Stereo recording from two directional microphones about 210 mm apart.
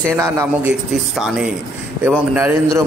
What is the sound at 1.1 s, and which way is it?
A man's voice, centre (ahead or behind).